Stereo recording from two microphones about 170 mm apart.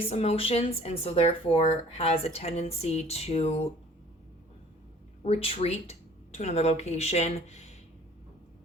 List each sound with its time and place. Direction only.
0.0 s speech: 35° left (ahead or behind)
5.2 s speech: 35° left (ahead or behind)